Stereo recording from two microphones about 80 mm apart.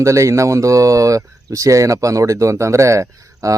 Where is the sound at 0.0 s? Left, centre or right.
Right.